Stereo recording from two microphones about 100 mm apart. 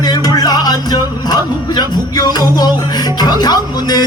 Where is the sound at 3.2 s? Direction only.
45° left (ahead or behind).